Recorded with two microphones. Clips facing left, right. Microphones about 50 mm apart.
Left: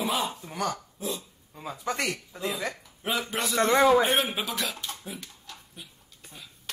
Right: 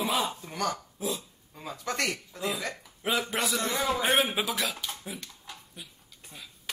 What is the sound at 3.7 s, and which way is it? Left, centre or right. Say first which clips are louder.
Speech: left 14 dB; left.